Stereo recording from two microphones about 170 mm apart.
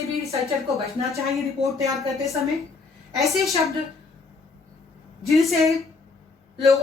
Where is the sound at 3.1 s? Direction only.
Centre (ahead or behind).